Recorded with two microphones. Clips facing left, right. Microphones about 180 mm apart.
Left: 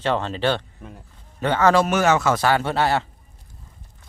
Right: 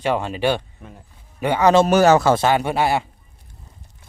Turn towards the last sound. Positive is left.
turn(degrees=-15)  # may be behind; listen again after turning